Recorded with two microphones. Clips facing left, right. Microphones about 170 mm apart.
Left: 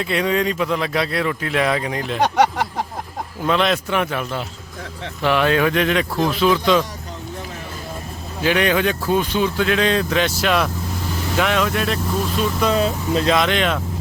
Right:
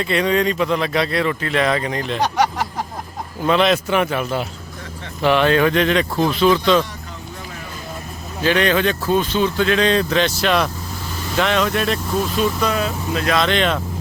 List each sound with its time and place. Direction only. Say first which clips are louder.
0.0 s speech: right 2 dB; 5° left (ahead or behind)
3.4 s speech: right 3 dB; centre (ahead or behind)
8.4 s speech: right 1 dB; 10° left (ahead or behind)
12.7 s speech: left 3 dB; 30° left (ahead or behind)
13.3 s speech: right 4 dB; 10° left (ahead or behind)